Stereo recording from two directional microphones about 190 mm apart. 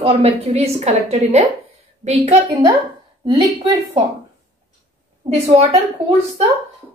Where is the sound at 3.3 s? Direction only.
30° right (ahead or behind).